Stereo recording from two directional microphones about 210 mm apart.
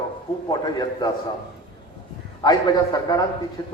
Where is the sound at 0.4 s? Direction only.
20° left (ahead or behind).